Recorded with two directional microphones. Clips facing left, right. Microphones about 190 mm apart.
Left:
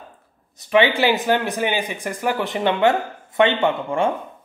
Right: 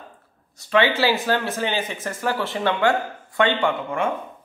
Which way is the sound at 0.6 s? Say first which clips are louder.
Left 2 dB; 15° left (ahead or behind).